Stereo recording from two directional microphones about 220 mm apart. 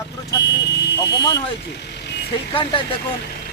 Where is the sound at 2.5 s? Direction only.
20° left (ahead or behind).